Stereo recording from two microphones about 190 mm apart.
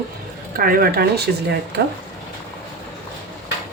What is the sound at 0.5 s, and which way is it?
Speech, 50° right (ahead or behind).